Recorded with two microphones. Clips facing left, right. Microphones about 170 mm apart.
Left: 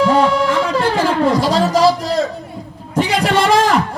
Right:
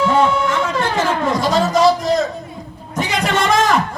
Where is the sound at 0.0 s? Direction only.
35° left (ahead or behind).